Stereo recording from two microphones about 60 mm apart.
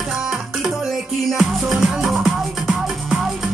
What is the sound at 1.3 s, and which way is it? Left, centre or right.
Music, centre.